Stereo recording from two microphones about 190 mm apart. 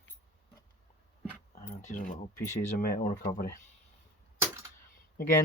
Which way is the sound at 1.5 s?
45° left (ahead or behind).